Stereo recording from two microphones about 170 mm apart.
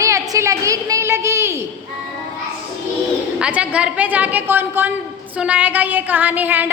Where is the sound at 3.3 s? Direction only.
5° right (ahead or behind).